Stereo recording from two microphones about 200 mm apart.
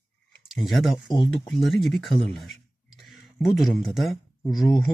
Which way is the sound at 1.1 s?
25° left (ahead or behind).